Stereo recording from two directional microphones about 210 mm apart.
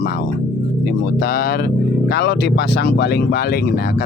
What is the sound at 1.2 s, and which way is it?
Speech, 45° left (ahead or behind).